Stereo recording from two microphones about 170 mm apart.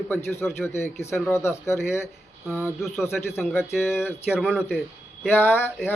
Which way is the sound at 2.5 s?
5° right (ahead or behind).